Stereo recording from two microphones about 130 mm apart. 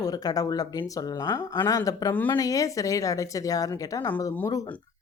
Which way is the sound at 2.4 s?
25° left (ahead or behind).